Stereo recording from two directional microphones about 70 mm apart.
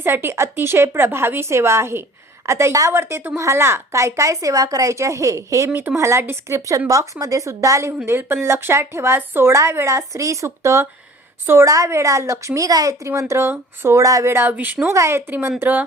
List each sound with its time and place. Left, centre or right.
0.0 s a woman's voice: right
2.9 s a woman's voice: right
8.0 s a woman's voice: right
13.1 s a woman's voice: right
14.3 s speech: right
14.9 s a woman's voice: right
15.3 s speech: right